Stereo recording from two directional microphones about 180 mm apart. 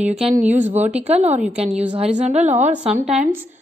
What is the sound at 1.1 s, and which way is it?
Speech, 35° right (ahead or behind).